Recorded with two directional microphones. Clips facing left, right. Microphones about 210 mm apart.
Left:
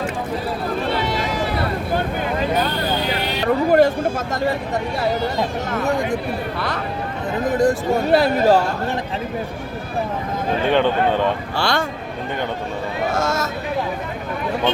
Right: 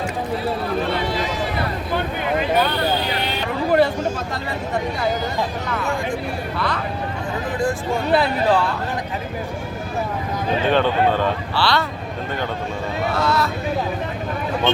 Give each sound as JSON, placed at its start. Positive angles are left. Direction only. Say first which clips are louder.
{"t": 3.4, "sound": "a sound", "louder": "left 3 dB", "side_deg": 45}
{"t": 5.6, "sound": "speech", "louder": "left 3 dB", "side_deg": 40}
{"t": 7.6, "sound": "speech", "louder": "left 4 dB", "side_deg": 40}
{"t": 10.7, "sound": "speech", "louder": "left 1 dB", "side_deg": 15}
{"t": 11.5, "sound": "speech", "louder": "even", "side_deg": 45}
{"t": 13.1, "sound": "vehicle", "louder": "right 2 dB", "side_deg": 45}